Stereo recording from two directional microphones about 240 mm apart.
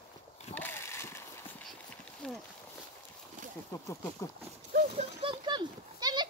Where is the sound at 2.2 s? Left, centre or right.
Centre.